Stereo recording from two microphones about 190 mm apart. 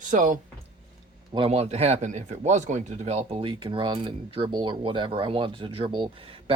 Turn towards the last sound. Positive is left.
turn(degrees=-30)  # may be behind; listen again after turning